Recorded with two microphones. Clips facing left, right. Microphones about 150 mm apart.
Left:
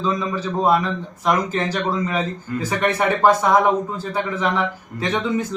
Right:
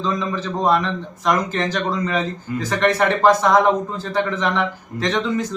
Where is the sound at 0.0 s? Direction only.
10° left (ahead or behind).